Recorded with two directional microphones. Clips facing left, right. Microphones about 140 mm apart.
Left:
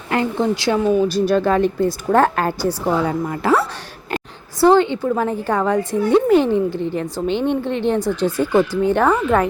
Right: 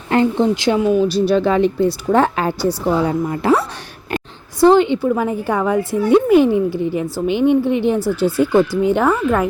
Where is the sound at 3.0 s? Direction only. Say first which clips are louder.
Right 3 dB; 20° right (ahead or behind).